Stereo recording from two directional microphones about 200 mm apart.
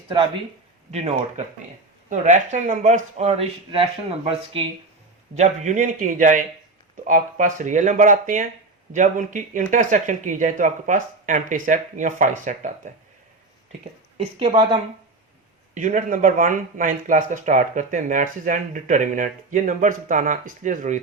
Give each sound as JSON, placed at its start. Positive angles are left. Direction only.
{"t": 0.9, "sound": "speech", "side_deg": -30}
{"t": 2.5, "sound": "speech", "side_deg": -35}
{"t": 5.4, "sound": "speech", "side_deg": -40}
{"t": 14.2, "sound": "a woman's voice", "side_deg": -25}
{"t": 15.7, "sound": "speech", "side_deg": -40}